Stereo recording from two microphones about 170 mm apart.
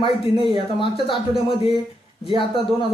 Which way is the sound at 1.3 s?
35° left (ahead or behind).